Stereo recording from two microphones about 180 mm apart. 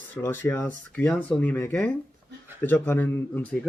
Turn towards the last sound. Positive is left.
turn(degrees=10)  # may be behind; listen again after turning